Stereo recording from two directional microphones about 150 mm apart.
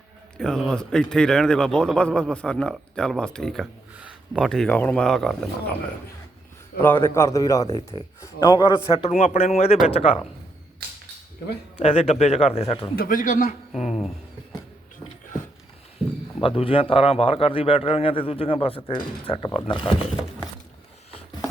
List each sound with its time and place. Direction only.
0.3 s a man's voice: 5° left (ahead or behind)
6.7 s a man's voice: 15° left (ahead or behind); by 9.0 s 35° left (ahead or behind)
9.0 s a man's voice: 50° left (ahead or behind)
11.8 s a man's voice: 40° left (ahead or behind)
13.0 s a man's voice: 65° left (ahead or behind)
16.4 s a man's voice: 35° left (ahead or behind)